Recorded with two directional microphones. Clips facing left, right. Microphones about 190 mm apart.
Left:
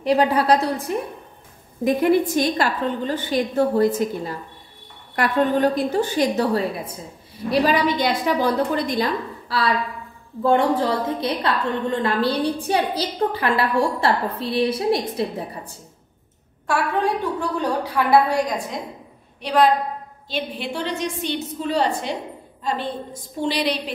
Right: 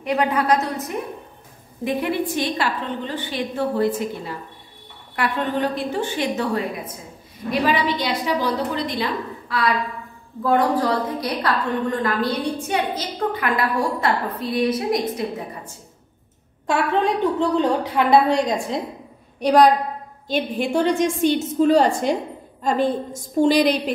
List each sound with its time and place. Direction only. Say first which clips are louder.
0.0 s a woman's voice: left 3 dB; 35° left (ahead or behind)
1.9 s a woman's voice: left 5 dB; 40° left (ahead or behind)
5.1 s a woman's voice: left 4 dB; 40° left (ahead or behind)
16.6 s a woman's voice: right 2 dB; 20° right (ahead or behind)
19.4 s a woman's voice: right 3 dB; 45° right (ahead or behind)